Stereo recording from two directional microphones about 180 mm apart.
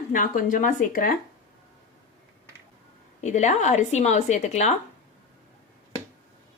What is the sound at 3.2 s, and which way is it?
A woman's voice, 40° left (ahead or behind).